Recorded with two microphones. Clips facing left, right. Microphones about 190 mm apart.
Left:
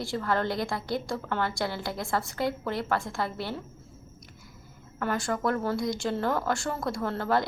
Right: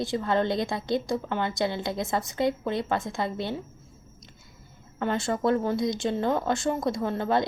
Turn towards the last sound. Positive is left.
turn(degrees=-20)  # may be behind; listen again after turning